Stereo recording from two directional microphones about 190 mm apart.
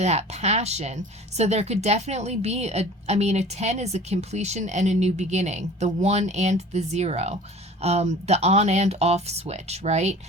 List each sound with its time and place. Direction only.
0.0 s a woman's voice: 35° right (ahead or behind)